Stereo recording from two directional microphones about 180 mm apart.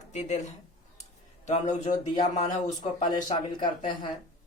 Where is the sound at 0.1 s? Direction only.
40° left (ahead or behind).